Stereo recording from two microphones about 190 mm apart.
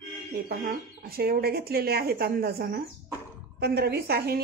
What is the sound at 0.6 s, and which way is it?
A woman's voice, 50° right (ahead or behind).